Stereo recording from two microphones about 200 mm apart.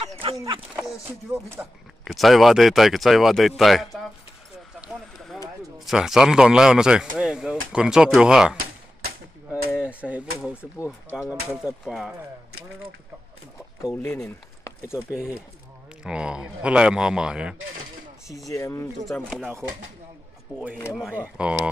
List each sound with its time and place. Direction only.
0.0 s a sound: 30° right (ahead or behind)
1.3 s speech: 5° right (ahead or behind)
5.9 s speech: centre (ahead or behind)
9.7 s speech: 5° right (ahead or behind)
10.6 s speech: 15° left (ahead or behind)
11.5 s speech: centre (ahead or behind)
13.8 s speech: 15° left (ahead or behind)
14.2 s a sound: 10° left (ahead or behind)
15.0 s speech: 5° right (ahead or behind)
18.5 s speech: 15° left (ahead or behind)
19.0 s speech: centre (ahead or behind)
20.5 s speech: 15° right (ahead or behind)